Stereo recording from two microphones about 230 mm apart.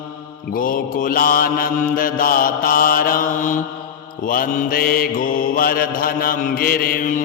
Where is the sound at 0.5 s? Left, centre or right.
Left.